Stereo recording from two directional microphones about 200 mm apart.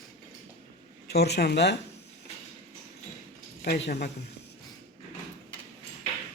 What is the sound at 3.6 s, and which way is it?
Speech, 55° left (ahead or behind).